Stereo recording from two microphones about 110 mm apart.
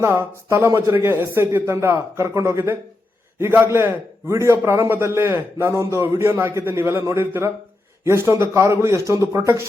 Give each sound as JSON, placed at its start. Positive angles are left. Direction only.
{"t": 0.0, "sound": "a man's voice", "side_deg": -20}